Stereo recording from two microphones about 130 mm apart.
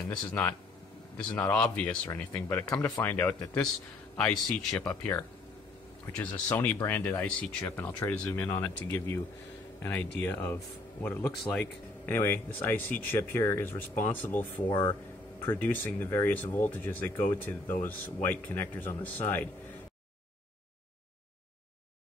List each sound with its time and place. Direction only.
0.1 s speech: 15° left (ahead or behind)
10.2 s speech: 15° left (ahead or behind)
14.7 s speech: 35° left (ahead or behind)
15.4 s speech: 15° left (ahead or behind)